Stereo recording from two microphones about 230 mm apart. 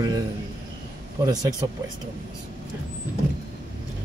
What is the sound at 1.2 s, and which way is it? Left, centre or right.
Speech, centre.